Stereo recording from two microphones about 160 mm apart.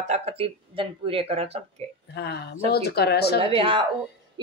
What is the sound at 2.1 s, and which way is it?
Speech, 90° left.